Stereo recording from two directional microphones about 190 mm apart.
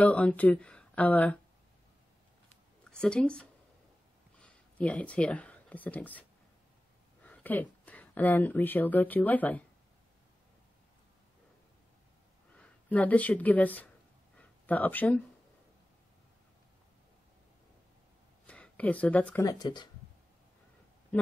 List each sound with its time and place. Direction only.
0.0 s speech: 10° left (ahead or behind)
2.8 s speech: 5° left (ahead or behind)
7.2 s speech: 10° left (ahead or behind)
12.5 s speech: 5° left (ahead or behind)
14.3 s a sound: 5° left (ahead or behind)
18.5 s speech: 5° left (ahead or behind)
19.6 s speech: 20° left (ahead or behind)